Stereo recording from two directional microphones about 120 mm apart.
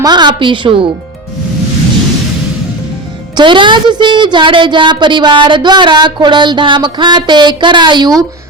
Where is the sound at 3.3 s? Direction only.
40° right (ahead or behind).